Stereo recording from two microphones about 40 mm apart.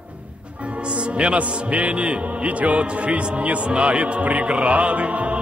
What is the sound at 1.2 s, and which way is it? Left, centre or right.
Music, right.